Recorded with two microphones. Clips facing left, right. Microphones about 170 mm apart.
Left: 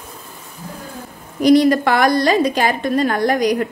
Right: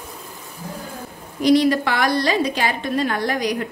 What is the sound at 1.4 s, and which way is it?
A woman's voice, 45° left (ahead or behind).